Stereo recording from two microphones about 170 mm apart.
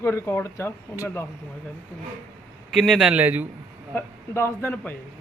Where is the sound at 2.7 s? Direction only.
Centre (ahead or behind).